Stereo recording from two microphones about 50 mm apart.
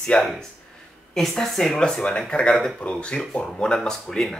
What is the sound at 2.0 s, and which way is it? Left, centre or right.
Speech, left.